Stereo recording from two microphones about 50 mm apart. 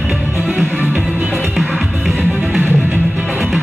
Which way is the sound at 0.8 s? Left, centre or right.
Right.